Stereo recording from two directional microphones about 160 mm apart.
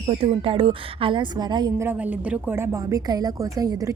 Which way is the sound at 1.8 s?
10° right (ahead or behind).